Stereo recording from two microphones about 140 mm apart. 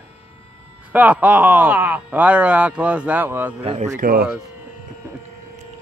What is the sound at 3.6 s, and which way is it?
Speech, 50° right (ahead or behind).